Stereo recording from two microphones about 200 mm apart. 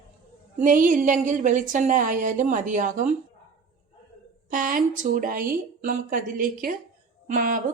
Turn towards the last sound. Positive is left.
turn(degrees=-45)  # may be behind; listen again after turning